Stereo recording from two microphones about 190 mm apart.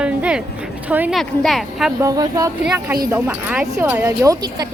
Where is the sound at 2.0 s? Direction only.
20° right (ahead or behind).